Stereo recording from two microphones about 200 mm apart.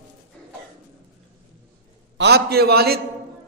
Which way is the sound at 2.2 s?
55° right (ahead or behind).